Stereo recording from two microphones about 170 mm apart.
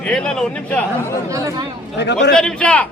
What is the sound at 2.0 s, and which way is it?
Speech, 90° left.